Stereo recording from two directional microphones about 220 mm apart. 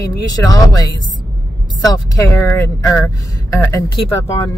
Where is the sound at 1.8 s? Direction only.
15° left (ahead or behind).